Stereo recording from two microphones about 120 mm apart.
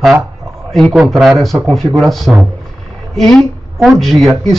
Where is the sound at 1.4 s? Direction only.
Centre (ahead or behind).